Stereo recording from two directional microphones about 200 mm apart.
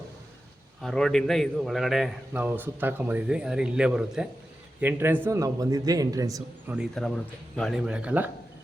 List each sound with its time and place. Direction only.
0.8 s a man's voice: centre (ahead or behind); by 6.7 s 15° right (ahead or behind)
6.7 s a man's voice: 5° left (ahead or behind)